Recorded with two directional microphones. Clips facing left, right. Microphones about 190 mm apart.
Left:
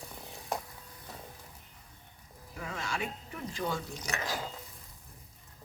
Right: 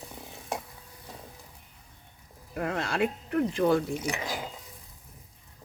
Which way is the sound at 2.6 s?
65° right (ahead or behind).